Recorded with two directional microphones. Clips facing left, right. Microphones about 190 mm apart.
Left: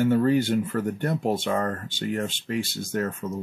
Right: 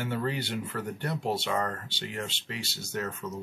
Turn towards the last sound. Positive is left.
turn(degrees=50)  # may be behind; listen again after turning